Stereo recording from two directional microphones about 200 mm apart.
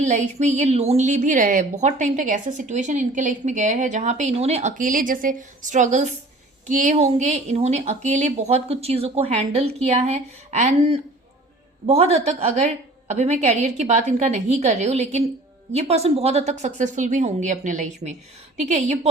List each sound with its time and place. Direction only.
0.0 s a woman's voice: 35° right (ahead or behind)